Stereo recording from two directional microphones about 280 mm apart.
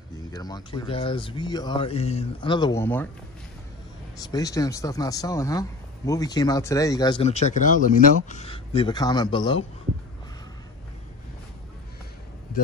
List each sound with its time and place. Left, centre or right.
0.3 s speech: centre
4.2 s speech: centre